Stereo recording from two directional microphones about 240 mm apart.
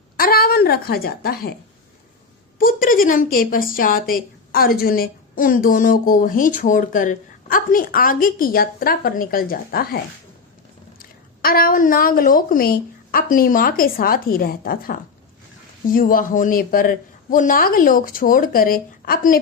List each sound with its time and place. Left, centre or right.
0.2 s speech: left
2.6 s speech: left
11.0 s speech: left